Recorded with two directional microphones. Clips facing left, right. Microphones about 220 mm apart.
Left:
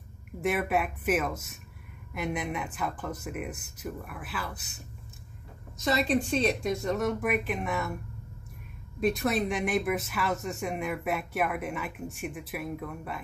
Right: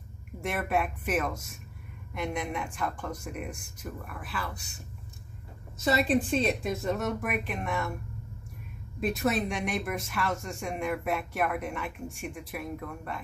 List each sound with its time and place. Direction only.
0.4 s speech: centre (ahead or behind)
5.9 s speech: 5° right (ahead or behind)
9.0 s speech: centre (ahead or behind)